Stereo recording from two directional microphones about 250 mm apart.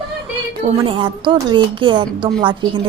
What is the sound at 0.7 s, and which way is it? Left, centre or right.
A woman's voice, right.